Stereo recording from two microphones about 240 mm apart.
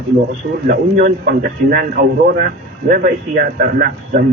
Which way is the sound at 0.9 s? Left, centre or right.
Right.